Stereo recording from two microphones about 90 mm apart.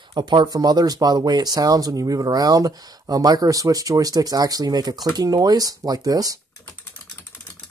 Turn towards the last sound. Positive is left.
turn(degrees=-45)  # may be behind; listen again after turning